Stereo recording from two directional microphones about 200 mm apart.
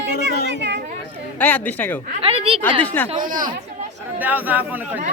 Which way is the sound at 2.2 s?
30° right (ahead or behind).